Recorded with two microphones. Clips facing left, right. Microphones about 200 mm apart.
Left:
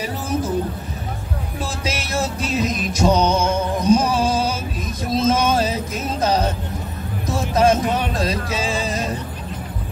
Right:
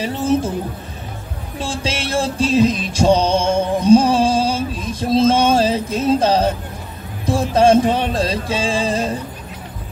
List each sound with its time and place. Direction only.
0.0 s speech: 25° right (ahead or behind)
1.6 s music: 30° right (ahead or behind)
7.2 s speech: 30° right (ahead or behind)